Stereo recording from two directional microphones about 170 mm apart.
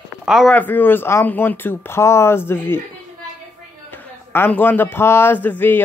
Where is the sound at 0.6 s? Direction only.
10° left (ahead or behind).